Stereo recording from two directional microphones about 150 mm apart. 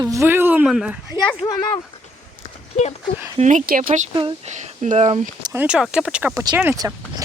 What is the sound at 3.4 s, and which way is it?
Speech, 55° right (ahead or behind).